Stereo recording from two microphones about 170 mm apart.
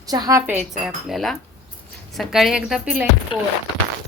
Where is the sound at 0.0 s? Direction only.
20° right (ahead or behind).